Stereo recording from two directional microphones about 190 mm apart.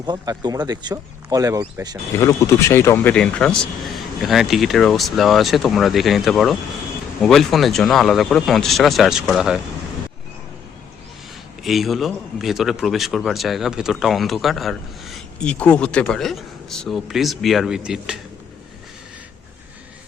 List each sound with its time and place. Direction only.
0.0 s speech: 20° right (ahead or behind)
2.1 s a man's voice: 15° left (ahead or behind); by 9.6 s centre (ahead or behind)
11.6 s a man's voice: centre (ahead or behind)